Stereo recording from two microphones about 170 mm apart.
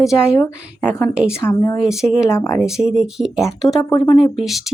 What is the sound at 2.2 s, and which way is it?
Speech, 15° left (ahead or behind).